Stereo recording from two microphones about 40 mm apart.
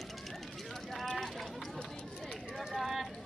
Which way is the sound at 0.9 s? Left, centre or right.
Centre.